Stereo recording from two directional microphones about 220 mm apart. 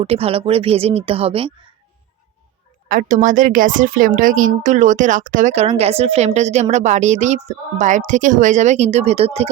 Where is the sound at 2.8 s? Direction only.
35° right (ahead or behind).